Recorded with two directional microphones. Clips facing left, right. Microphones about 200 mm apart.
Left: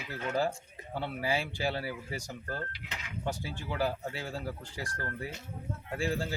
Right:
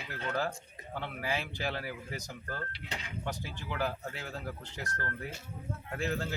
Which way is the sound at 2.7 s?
30° right (ahead or behind).